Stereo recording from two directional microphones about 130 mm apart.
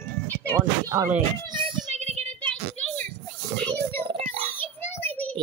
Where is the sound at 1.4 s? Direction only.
35° right (ahead or behind).